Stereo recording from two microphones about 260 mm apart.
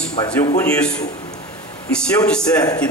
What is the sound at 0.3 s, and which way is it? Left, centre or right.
A man's voice, centre.